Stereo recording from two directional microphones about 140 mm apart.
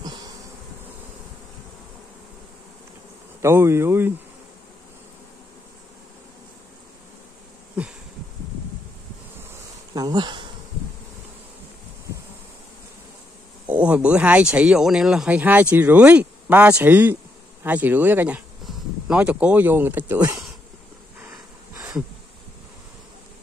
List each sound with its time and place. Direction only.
3.4 s speech: 20° right (ahead or behind)
7.8 s insect: 10° right (ahead or behind)
9.9 s speech: 30° right (ahead or behind)
13.7 s speech: 10° right (ahead or behind)